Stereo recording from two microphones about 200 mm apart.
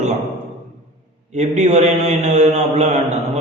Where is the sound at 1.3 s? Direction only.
35° right (ahead or behind).